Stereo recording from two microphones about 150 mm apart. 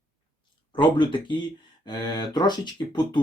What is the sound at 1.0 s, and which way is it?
Speech, 30° left (ahead or behind).